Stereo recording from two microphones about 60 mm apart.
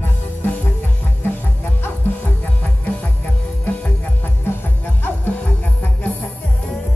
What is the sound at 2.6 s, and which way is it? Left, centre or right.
Music, left.